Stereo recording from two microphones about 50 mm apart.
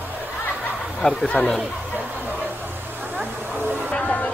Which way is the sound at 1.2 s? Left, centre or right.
Left.